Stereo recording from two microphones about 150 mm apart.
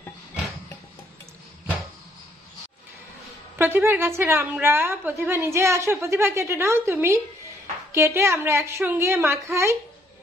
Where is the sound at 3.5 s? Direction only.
15° right (ahead or behind).